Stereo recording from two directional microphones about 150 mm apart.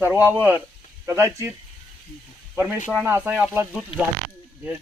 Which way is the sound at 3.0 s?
10° right (ahead or behind).